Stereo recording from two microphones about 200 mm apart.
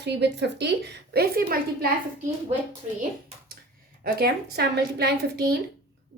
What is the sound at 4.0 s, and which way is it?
A woman's voice, 50° right (ahead or behind).